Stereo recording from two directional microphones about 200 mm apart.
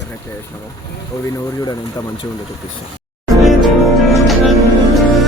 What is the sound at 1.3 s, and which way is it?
Speech, 20° left (ahead or behind).